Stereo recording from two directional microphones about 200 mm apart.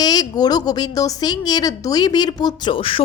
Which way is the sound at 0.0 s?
20° left (ahead or behind).